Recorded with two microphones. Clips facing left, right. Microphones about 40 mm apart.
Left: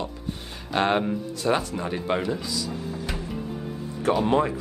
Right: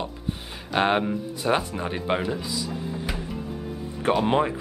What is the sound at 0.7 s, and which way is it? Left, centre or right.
Speech, centre.